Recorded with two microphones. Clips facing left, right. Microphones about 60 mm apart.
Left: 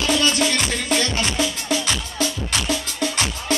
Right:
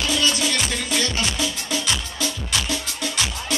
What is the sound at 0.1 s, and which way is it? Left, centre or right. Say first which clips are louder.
Music: left 4 dB; left.